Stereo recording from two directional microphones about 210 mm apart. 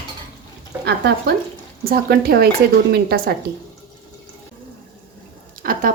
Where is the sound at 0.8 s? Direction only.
55° right (ahead or behind).